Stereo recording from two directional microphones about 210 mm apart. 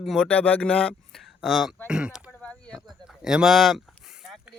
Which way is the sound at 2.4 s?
5° left (ahead or behind).